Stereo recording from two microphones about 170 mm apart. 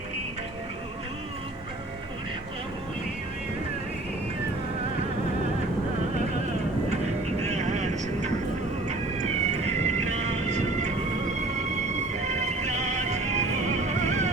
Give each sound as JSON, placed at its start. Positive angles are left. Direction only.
{"t": 7.4, "sound": "vehicle", "side_deg": -40}
{"t": 11.9, "sound": "music", "side_deg": -45}